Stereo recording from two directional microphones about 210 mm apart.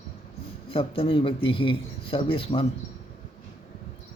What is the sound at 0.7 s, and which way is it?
Speech, 25° left (ahead or behind).